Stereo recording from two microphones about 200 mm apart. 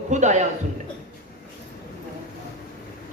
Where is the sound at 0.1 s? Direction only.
35° right (ahead or behind).